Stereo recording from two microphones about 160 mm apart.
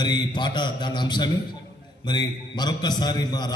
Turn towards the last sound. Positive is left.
turn(degrees=25)  # may be behind; listen again after turning